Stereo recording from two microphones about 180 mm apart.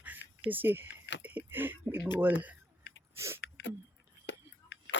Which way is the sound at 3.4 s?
90° left.